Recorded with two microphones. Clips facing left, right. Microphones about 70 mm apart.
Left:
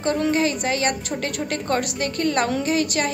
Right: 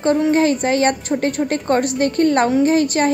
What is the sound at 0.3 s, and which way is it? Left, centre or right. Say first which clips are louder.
A woman's voice: right 6 dB; right.